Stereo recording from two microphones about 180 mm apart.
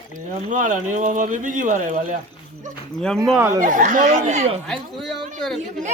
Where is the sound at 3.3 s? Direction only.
15° right (ahead or behind).